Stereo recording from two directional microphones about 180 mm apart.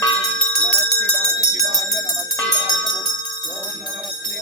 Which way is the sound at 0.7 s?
10° left (ahead or behind).